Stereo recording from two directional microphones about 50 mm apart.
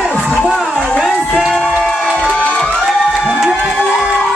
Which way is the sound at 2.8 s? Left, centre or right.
Centre.